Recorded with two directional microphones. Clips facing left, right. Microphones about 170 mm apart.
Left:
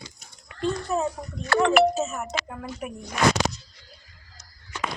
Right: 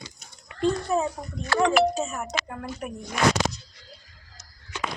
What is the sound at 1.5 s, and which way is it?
Speech, 60° left (ahead or behind).